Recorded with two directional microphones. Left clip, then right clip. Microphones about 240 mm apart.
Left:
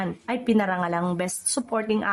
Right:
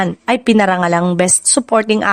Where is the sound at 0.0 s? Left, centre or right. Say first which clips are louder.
Right 13 dB; right.